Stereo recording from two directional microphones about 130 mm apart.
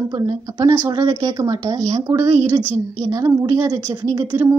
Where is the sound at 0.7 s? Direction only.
30° right (ahead or behind).